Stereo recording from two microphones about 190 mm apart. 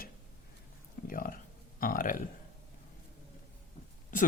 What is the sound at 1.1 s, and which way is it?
Speech, 50° left (ahead or behind).